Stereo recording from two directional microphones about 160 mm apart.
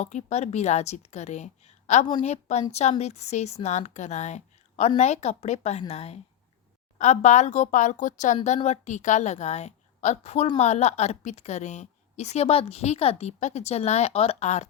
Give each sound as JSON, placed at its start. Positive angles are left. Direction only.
{"t": 0.0, "sound": "a woman's voice", "side_deg": 45}